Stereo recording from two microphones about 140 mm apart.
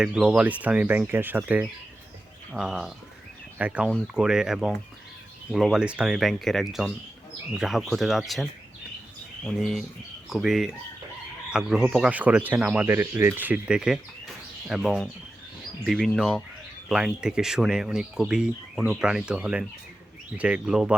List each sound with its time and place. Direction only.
0.0 s speech: 5° right (ahead or behind)